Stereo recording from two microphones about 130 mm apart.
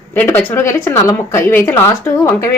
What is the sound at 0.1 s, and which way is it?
A woman's voice, 15° left (ahead or behind).